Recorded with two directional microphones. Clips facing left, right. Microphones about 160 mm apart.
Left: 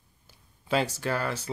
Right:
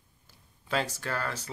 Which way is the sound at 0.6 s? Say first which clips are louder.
Left 4 dB; 20° left (ahead or behind).